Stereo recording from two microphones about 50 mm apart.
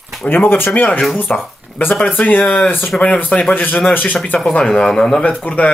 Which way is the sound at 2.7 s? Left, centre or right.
Left.